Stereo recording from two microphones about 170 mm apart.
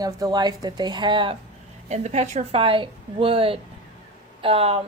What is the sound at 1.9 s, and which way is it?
A woman's voice, 40° right (ahead or behind).